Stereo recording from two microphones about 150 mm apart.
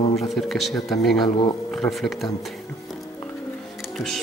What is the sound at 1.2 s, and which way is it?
Speech, 30° left (ahead or behind).